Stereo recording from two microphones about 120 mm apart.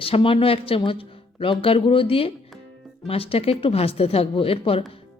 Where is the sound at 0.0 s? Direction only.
50° left (ahead or behind).